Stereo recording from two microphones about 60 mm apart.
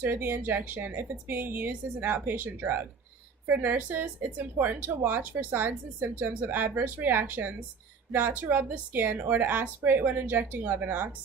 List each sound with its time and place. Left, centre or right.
0.0 s speech: right